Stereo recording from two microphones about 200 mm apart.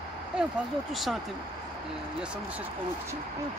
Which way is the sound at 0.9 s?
Centre (ahead or behind).